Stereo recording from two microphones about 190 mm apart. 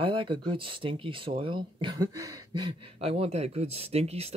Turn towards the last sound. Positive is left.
turn(degrees=-30)  # may be behind; listen again after turning